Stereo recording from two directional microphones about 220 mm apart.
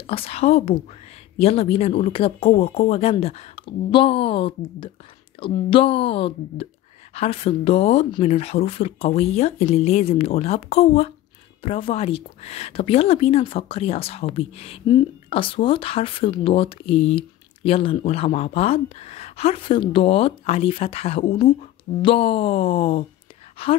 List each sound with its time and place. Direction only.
0.0 s a woman's voice: 25° left (ahead or behind)